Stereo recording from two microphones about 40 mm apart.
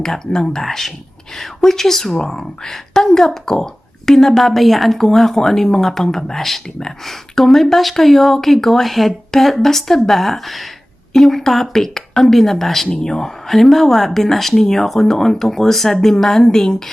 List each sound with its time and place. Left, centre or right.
0.0 s a woman's voice: centre
0.6 s a woman's voice: centre